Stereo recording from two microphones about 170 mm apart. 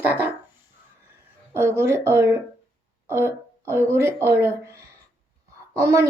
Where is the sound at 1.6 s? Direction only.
15° right (ahead or behind).